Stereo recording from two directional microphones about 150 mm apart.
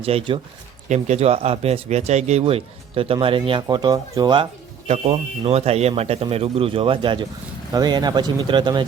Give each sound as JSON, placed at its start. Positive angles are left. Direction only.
{"t": 0.0, "sound": "speech", "side_deg": -40}
{"t": 0.9, "sound": "speech", "side_deg": -50}
{"t": 4.9, "sound": "speech", "side_deg": -40}